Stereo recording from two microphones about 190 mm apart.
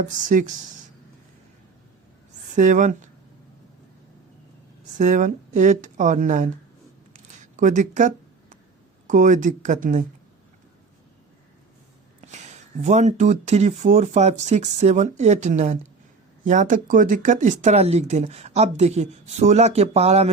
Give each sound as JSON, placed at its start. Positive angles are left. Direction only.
{"t": 0.0, "sound": "speech", "side_deg": -40}
{"t": 2.6, "sound": "speech", "side_deg": -40}
{"t": 4.8, "sound": "speech", "side_deg": -40}
{"t": 7.1, "sound": "a sound", "side_deg": -40}
{"t": 9.0, "sound": "speech", "side_deg": -40}
{"t": 12.2, "sound": "speech", "side_deg": -40}